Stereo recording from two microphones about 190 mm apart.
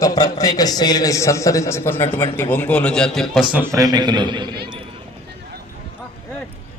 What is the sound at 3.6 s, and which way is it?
Speech, 15° right (ahead or behind).